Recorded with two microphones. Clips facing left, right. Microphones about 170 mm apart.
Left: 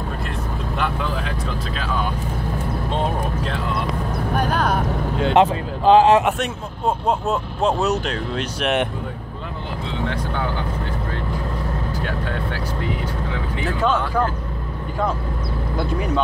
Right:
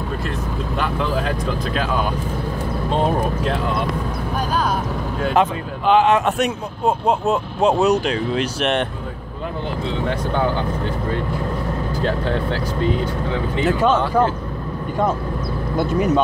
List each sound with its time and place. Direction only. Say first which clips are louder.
4.3 s vehicle: left 1 dB; 60° left (ahead or behind)
5.2 s speech: left 2 dB; 25° left (ahead or behind)
6.3 s speech: right 5 dB; 10° right (ahead or behind)
12.8 s speech: right 8 dB; 15° left (ahead or behind)
13.3 s speech: right 8 dB; 20° right (ahead or behind)
15.8 s speech: right 6 dB; 20° right (ahead or behind)